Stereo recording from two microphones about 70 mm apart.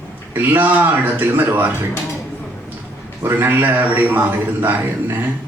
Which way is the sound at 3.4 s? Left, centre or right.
Right.